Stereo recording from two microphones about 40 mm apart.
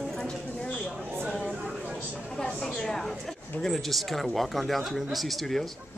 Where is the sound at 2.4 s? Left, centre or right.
Centre.